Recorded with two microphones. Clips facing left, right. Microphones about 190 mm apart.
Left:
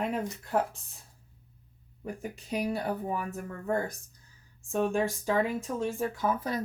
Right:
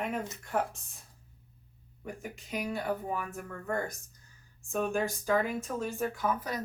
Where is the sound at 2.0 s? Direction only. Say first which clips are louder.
Left 4 dB; 35° left (ahead or behind).